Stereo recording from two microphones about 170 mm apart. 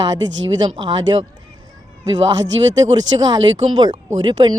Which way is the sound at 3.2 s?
25° right (ahead or behind).